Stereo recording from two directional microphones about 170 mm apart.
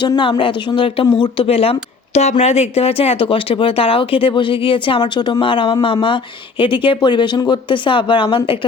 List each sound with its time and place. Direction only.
0.0 s speech: 25° left (ahead or behind)